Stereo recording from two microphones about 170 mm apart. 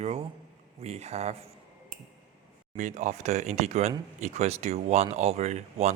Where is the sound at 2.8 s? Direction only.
45° right (ahead or behind).